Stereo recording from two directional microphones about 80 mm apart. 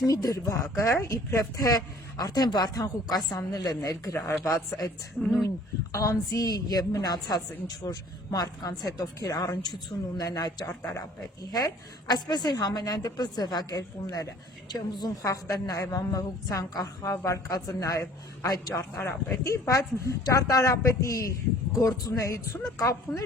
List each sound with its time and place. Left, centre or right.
0.0 s speech: left
4.3 s speech: left
5.2 s speech: centre
5.9 s a woman's voice: left
15.2 s speech: left
18.9 s speech: left